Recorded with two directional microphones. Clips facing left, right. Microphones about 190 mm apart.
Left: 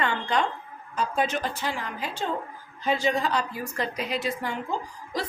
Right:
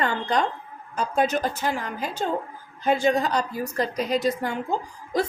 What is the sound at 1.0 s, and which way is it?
A woman's voice, 45° right (ahead or behind).